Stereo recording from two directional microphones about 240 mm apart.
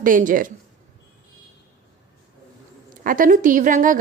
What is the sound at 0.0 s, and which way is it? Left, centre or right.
Speech, right.